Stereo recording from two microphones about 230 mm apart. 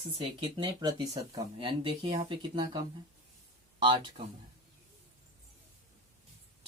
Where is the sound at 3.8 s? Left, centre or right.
Right.